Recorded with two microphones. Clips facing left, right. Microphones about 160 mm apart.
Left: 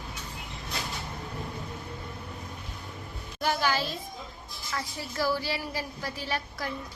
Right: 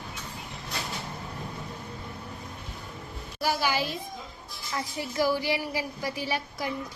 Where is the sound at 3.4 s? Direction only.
10° right (ahead or behind).